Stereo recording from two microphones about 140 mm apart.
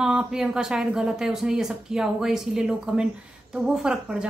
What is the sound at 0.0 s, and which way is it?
A woman's voice, 5° right (ahead or behind).